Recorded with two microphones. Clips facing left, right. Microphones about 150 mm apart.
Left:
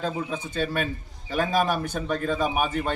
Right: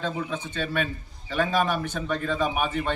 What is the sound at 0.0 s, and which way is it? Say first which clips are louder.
A man's voice: left 1 dB; 40° left (ahead or behind).